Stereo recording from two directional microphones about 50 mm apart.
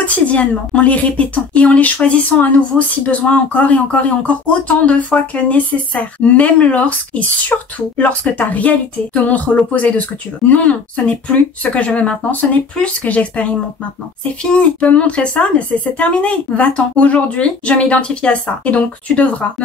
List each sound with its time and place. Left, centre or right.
0.0 s speech: left
2.7 s speech: centre
3.1 s speech: left